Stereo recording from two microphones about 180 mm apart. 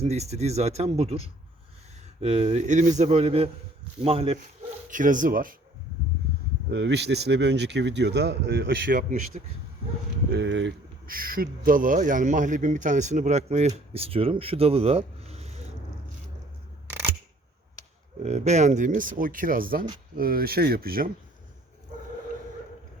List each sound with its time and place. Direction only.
0.0 s speech: 35° right (ahead or behind)
4.9 s speech: 45° right (ahead or behind)
6.7 s speech: 70° right (ahead or behind)
8.9 s speech: 50° right (ahead or behind)
10.3 s speech: 85° right
11.0 s speech: 55° right (ahead or behind); by 15.6 s 35° right (ahead or behind)
18.2 s speech: 40° right (ahead or behind); by 21.1 s 55° right (ahead or behind)